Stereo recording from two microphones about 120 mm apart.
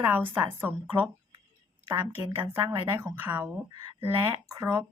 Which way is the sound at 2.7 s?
35° right (ahead or behind).